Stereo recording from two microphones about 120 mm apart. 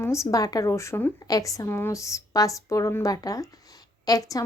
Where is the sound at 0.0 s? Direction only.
25° left (ahead or behind).